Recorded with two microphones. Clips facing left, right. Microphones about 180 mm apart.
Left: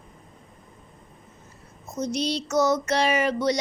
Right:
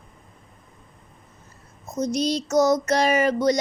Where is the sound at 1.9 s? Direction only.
40° right (ahead or behind).